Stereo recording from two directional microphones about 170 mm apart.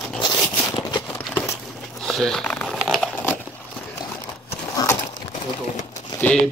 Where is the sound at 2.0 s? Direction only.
5° left (ahead or behind).